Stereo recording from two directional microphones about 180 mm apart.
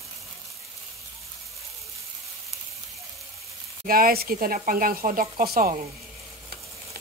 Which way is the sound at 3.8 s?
55° right (ahead or behind).